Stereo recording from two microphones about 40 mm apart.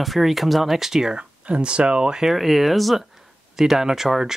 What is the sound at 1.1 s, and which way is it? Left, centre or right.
Speech, right.